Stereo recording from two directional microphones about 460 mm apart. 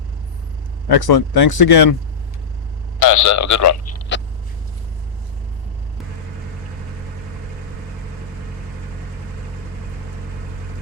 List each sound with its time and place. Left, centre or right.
0.9 s speech: left
3.0 s a man's voice: left